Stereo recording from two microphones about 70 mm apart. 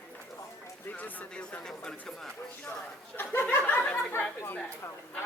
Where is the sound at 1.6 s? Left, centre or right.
Centre.